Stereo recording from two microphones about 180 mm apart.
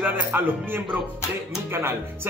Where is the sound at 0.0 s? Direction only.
10° right (ahead or behind).